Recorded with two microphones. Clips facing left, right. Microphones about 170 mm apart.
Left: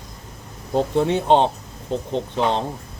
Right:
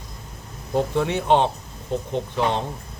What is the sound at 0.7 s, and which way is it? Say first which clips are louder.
Speech: left 3 dB; 25° left (ahead or behind).